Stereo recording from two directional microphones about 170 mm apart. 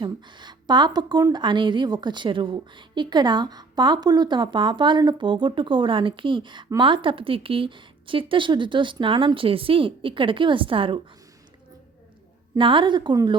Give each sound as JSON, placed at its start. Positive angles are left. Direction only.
{"t": 0.0, "sound": "a woman's voice", "side_deg": -25}
{"t": 12.5, "sound": "a woman's voice", "side_deg": -30}